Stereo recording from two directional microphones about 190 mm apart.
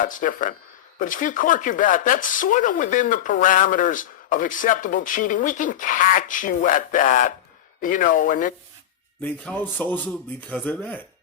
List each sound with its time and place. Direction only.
0.0 s speech: 45° left (ahead or behind)
9.2 s a man's voice: 5° left (ahead or behind)